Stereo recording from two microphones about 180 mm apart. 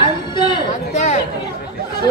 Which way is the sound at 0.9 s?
40° left (ahead or behind).